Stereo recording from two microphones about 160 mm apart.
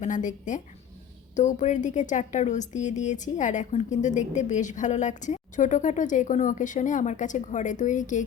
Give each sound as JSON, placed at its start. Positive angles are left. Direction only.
{"t": 0.0, "sound": "speech", "side_deg": 50}